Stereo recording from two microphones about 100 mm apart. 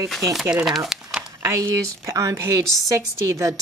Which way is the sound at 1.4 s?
35° right (ahead or behind).